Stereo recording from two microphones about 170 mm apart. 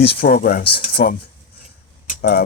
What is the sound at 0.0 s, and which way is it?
Speech, 70° left (ahead or behind).